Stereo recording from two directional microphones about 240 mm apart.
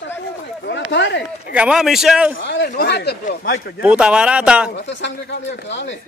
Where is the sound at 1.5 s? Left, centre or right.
Centre.